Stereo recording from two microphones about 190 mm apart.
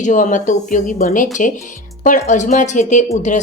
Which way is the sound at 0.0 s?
40° left (ahead or behind).